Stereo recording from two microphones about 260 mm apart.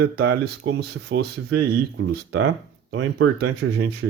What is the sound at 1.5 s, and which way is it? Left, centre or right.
Speech, right.